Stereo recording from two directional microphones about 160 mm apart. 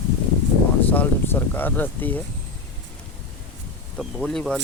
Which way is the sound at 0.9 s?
10° left (ahead or behind).